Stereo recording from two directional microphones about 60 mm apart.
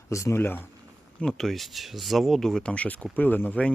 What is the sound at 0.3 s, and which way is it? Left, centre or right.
Speech, left.